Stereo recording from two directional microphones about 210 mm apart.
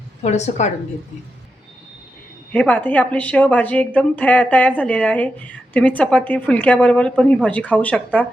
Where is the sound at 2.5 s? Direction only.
5° left (ahead or behind).